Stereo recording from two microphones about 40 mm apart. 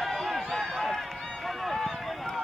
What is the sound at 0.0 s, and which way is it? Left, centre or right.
Run, centre.